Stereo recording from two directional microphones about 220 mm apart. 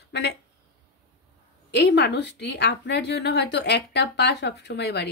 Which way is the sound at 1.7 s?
50° left (ahead or behind).